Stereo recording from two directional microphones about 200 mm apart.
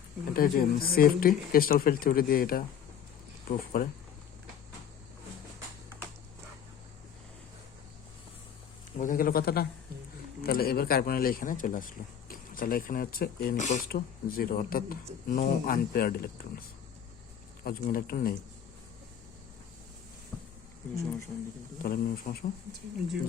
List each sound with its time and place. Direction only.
0.3 s speech: 45° left (ahead or behind)
9.0 s speech: 45° left (ahead or behind)
17.6 s speech: 45° left (ahead or behind)
20.3 s sizzle: centre (ahead or behind)
21.8 s speech: 45° left (ahead or behind)